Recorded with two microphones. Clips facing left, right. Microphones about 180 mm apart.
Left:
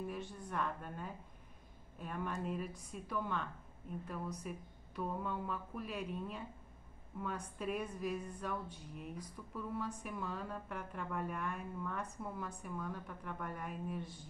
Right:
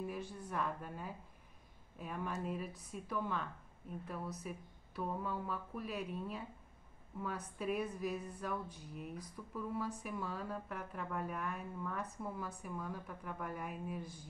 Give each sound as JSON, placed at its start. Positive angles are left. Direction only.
{"t": 0.0, "sound": "a woman's voice", "side_deg": -5}